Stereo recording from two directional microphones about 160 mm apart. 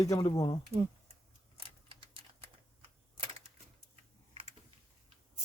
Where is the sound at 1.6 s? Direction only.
35° right (ahead or behind).